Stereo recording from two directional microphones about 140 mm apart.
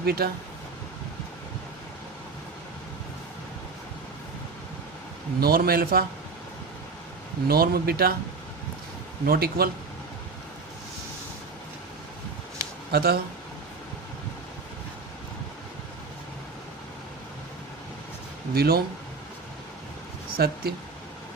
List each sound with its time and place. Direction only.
0.0 s a man's voice: 90° right
5.4 s a man's voice: 90° right
7.4 s a man's voice: 90° right
9.2 s a man's voice: 90° right
12.9 s a man's voice: 90° right
18.5 s a man's voice: 90° right
20.3 s speech: 90° right